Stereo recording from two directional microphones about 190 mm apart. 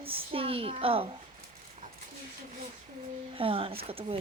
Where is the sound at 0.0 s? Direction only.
30° right (ahead or behind).